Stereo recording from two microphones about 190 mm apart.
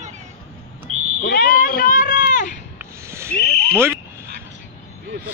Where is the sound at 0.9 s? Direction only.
90° right.